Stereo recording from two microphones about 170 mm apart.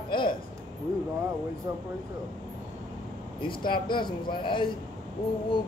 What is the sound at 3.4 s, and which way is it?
Speech, 30° left (ahead or behind).